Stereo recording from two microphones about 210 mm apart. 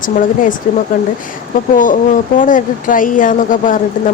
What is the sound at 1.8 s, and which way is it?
Speech, 40° left (ahead or behind).